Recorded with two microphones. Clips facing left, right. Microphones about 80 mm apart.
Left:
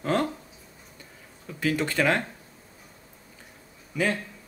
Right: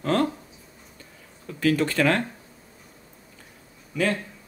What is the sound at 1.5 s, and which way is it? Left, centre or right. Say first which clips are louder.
Speech: right 4 dB; centre.